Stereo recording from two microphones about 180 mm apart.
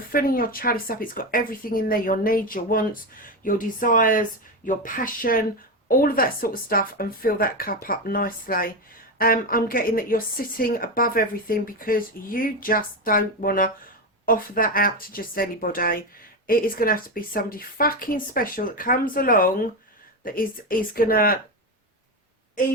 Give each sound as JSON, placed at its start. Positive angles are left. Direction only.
{"t": 0.1, "sound": "a woman's voice", "side_deg": 55}